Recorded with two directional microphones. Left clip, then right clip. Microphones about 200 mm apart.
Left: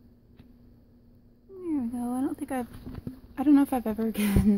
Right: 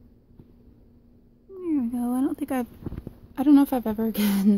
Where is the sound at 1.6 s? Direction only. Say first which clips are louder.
Right 4 dB; 20° right (ahead or behind).